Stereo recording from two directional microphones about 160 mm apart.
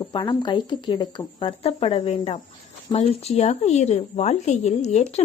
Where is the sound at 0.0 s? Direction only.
30° left (ahead or behind).